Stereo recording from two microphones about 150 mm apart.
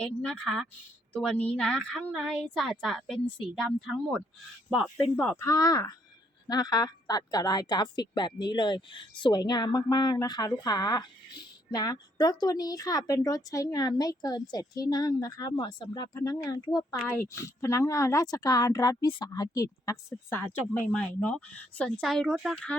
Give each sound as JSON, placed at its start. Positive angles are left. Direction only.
{"t": 0.0, "sound": "a woman's voice", "side_deg": 5}
{"t": 5.4, "sound": "a woman's voice", "side_deg": 20}